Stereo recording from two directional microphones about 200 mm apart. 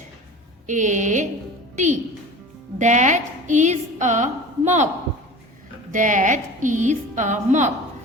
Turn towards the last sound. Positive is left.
turn(degrees=-35)  # may be behind; listen again after turning